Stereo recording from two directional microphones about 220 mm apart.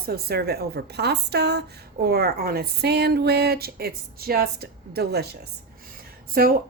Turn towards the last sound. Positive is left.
turn(degrees=-40)  # may be behind; listen again after turning